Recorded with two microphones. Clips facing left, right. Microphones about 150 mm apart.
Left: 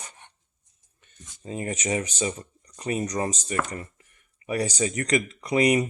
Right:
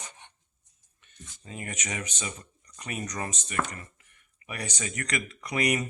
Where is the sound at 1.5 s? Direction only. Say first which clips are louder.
Left 9 dB; 30° left (ahead or behind).